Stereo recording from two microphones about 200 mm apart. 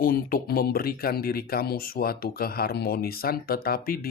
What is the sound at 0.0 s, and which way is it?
Speech, 45° left (ahead or behind).